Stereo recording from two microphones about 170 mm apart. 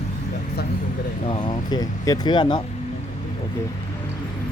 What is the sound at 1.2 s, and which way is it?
Speech, 25° left (ahead or behind).